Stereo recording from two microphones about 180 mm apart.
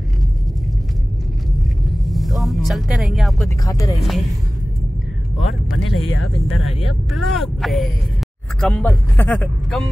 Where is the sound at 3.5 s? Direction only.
20° left (ahead or behind).